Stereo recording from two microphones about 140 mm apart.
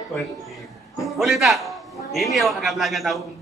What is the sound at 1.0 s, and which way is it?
A man's voice, centre (ahead or behind).